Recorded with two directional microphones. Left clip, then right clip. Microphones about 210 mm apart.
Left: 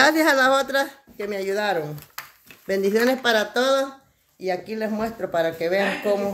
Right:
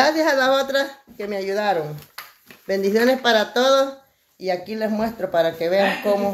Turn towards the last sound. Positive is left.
turn(degrees=10)  # may be behind; listen again after turning